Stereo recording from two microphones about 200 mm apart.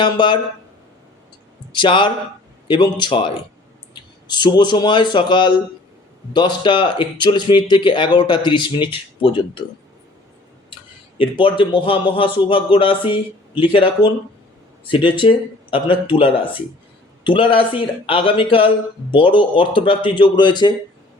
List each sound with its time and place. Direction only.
0.0 s speech: 25° left (ahead or behind)
1.7 s speech: 25° left (ahead or behind)
11.2 s speech: 25° left (ahead or behind)